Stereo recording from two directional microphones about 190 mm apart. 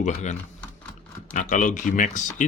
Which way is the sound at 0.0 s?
35° left (ahead or behind).